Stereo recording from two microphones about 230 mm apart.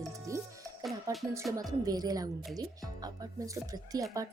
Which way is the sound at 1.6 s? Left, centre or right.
Centre.